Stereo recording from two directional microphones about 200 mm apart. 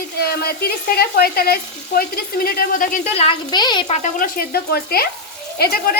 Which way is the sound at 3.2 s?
25° left (ahead or behind).